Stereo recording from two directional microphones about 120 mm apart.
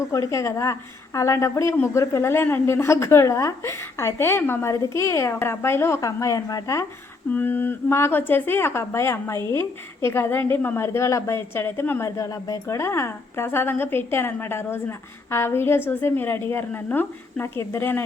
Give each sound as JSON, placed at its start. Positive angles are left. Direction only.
{"t": 0.1, "sound": "a woman's voice", "side_deg": 25}
{"t": 7.3, "sound": "a woman's voice", "side_deg": 15}